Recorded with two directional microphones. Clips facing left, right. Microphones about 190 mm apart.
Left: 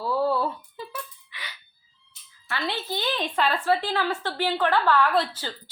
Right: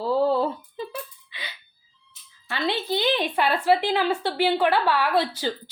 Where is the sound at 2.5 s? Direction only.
20° right (ahead or behind).